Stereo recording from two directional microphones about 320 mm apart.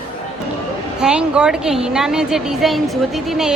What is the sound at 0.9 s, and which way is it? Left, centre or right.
A woman's voice, centre.